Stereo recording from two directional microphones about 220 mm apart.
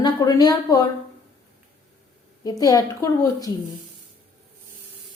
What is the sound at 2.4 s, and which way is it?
Speech, 15° left (ahead or behind).